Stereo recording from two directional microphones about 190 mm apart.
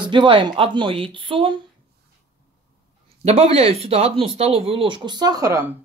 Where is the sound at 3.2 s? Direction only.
30° right (ahead or behind); by 5.7 s 15° right (ahead or behind).